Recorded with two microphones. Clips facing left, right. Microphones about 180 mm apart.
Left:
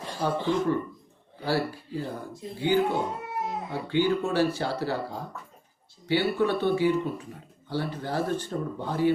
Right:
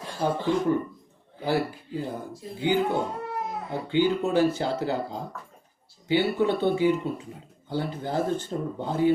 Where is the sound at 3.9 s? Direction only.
20° right (ahead or behind).